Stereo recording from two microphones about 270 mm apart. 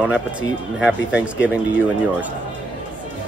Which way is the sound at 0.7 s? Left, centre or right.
Centre.